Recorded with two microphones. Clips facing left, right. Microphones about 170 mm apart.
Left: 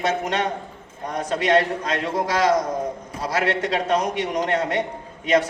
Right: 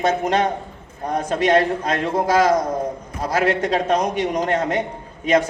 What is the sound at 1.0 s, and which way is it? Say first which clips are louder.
Speech: right 3 dB; 35° right (ahead or behind).